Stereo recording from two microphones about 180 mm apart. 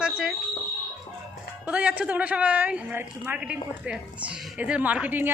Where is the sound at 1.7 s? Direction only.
5° right (ahead or behind).